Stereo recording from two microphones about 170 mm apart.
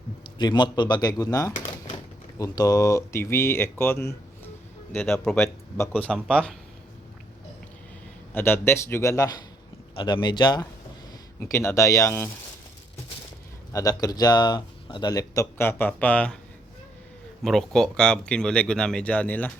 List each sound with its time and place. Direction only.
0.3 s speech: 25° left (ahead or behind)
4.9 s speech: centre (ahead or behind)
5.7 s speech: 15° left (ahead or behind)
8.3 s speech: 15° left (ahead or behind)
13.7 s speech: 20° left (ahead or behind)
17.4 s speech: centre (ahead or behind)